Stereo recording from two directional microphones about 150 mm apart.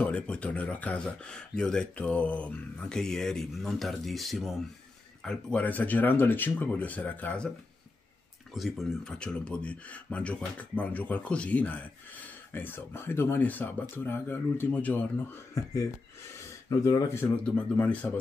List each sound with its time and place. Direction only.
0.0 s speech: 10° left (ahead or behind)
8.5 s speech: centre (ahead or behind)
15.5 s speech: 20° left (ahead or behind)